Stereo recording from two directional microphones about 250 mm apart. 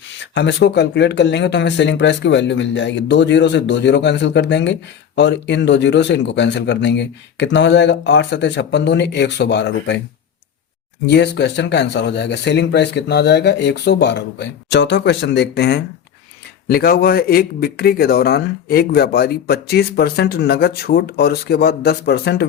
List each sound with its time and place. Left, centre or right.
0.3 s speech: left
11.1 s speech: left